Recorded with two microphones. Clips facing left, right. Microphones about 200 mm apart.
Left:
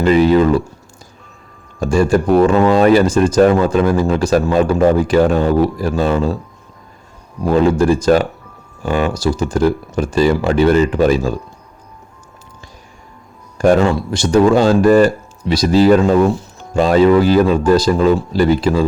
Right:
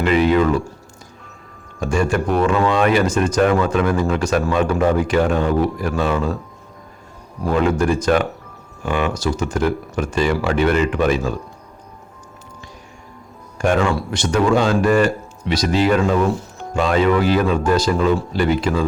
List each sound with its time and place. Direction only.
0.0 s speech: 35° left (ahead or behind)
1.8 s speech: 35° left (ahead or behind)
7.5 s speech: 30° left (ahead or behind)
13.6 s speech: 35° left (ahead or behind)